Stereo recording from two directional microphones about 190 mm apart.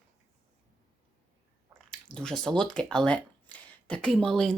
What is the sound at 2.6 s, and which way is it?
Speech, 5° left (ahead or behind).